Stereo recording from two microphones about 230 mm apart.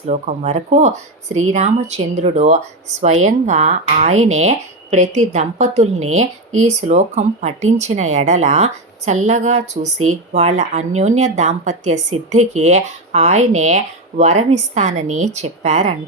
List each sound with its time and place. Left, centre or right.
0.1 s speech: right
1.3 s speech: right
1.5 s speech: right